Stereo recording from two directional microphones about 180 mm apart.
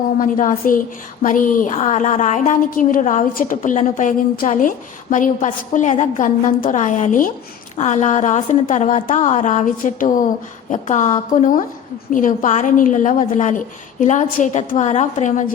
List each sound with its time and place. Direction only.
0.2 s a woman's voice: 45° left (ahead or behind)